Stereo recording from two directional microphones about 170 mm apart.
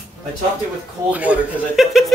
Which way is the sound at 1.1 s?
10° right (ahead or behind).